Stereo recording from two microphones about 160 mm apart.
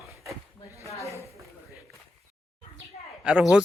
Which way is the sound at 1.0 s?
20° left (ahead or behind).